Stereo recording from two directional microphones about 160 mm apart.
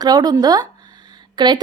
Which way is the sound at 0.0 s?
25° right (ahead or behind).